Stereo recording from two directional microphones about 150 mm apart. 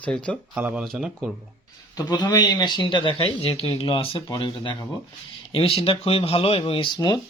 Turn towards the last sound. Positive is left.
turn(degrees=25)  # may be behind; listen again after turning